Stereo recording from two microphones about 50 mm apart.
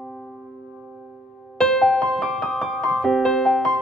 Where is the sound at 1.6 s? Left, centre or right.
Centre.